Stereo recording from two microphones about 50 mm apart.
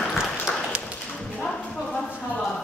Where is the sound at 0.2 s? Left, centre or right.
Centre.